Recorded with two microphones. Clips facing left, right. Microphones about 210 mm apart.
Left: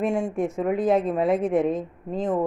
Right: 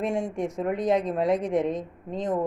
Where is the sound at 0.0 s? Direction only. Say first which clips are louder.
Left 3 dB; centre (ahead or behind).